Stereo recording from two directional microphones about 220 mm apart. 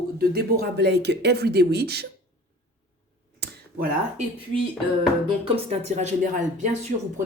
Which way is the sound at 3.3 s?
50° right (ahead or behind).